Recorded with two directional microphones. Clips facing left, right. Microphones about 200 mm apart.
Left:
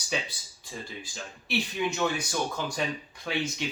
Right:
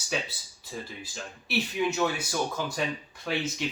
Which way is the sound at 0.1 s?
5° right (ahead or behind).